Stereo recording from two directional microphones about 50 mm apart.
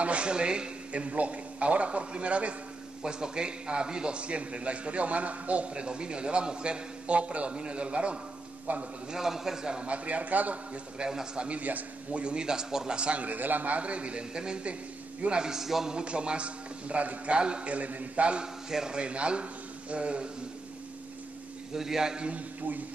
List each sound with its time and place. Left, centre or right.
0.0 s a man's voice: right
9.1 s a man's voice: centre; by 10.8 s right
11.0 s a man's voice: centre
11.4 s a man's voice: right; by 16.0 s centre
16.0 s a man's voice: right
21.7 s a man's voice: centre